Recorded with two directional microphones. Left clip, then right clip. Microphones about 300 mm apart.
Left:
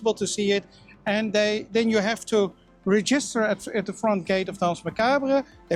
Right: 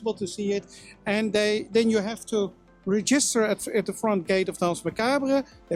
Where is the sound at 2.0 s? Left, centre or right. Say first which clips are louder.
Left 5 dB; left.